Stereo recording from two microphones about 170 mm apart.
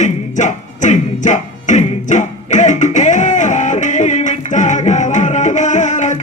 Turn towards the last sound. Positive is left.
turn(degrees=45)  # may be behind; listen again after turning